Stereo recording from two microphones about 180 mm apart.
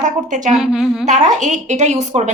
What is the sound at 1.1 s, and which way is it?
Speech, 40° right (ahead or behind).